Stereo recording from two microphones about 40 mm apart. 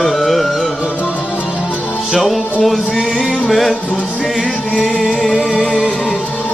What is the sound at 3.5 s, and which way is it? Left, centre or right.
Music, centre.